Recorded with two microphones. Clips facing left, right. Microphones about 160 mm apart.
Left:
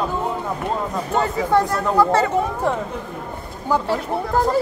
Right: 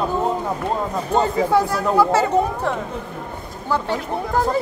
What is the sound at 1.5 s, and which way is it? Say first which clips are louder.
Speech: even; 5° right (ahead or behind).